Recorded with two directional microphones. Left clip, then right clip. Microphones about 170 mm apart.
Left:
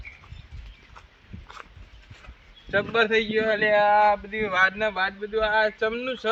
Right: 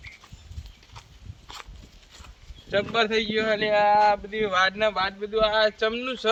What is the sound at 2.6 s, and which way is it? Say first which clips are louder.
A man's voice: left 1 dB; 40° right (ahead or behind).